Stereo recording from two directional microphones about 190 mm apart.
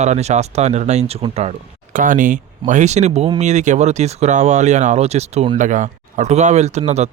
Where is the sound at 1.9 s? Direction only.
45° right (ahead or behind).